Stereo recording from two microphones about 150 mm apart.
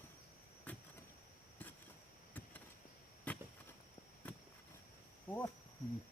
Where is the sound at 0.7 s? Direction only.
10° left (ahead or behind).